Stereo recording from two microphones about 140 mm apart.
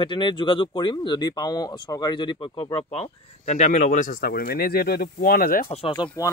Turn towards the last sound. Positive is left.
turn(degrees=25)  # may be behind; listen again after turning